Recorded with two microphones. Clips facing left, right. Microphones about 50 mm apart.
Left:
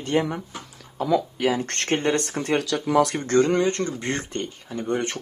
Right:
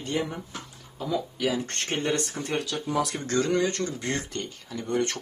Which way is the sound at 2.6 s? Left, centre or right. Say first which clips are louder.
Left 7 dB; left.